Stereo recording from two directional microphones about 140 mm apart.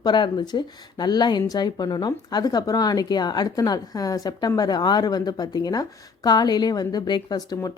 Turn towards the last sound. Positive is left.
turn(degrees=25)  # may be behind; listen again after turning